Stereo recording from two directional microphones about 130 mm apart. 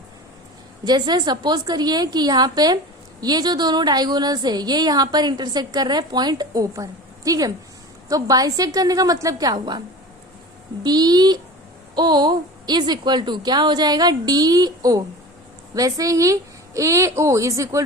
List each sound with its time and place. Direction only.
0.9 s a woman's voice: 35° right (ahead or behind)
10.8 s a woman's voice: 30° right (ahead or behind)